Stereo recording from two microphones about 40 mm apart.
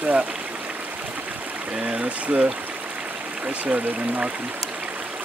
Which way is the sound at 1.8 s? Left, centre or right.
Right.